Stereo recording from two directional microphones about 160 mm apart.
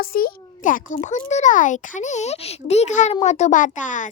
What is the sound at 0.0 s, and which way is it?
A child's voice, 70° left (ahead or behind).